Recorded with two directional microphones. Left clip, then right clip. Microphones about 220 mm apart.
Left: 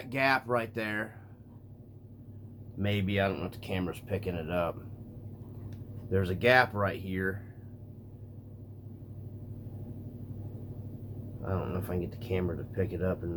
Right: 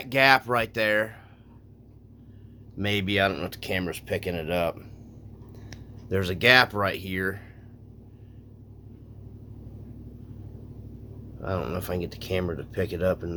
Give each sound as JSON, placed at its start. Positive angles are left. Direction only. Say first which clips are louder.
{"t": 0.0, "sound": "speech", "louder": "right 8 dB", "side_deg": -45}
{"t": 2.7, "sound": "speech", "louder": "right 6 dB", "side_deg": -45}
{"t": 6.1, "sound": "speech", "louder": "right 5 dB", "side_deg": -50}
{"t": 11.4, "sound": "speech", "louder": "right 6 dB", "side_deg": -45}